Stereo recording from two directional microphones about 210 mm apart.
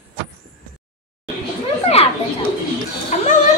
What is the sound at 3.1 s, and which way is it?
Speech, 35° left (ahead or behind).